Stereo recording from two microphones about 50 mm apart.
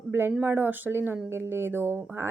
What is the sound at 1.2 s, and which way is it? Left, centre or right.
Speech, right.